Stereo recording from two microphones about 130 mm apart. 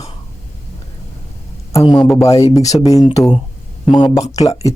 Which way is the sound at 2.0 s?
Centre (ahead or behind).